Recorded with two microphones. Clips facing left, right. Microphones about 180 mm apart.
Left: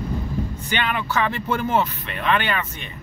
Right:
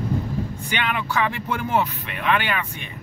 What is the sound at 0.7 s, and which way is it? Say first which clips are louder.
Speech: left 1 dB; 15° right (ahead or behind).